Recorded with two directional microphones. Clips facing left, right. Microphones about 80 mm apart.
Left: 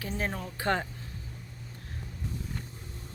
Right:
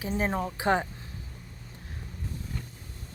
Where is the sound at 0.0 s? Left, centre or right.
Centre.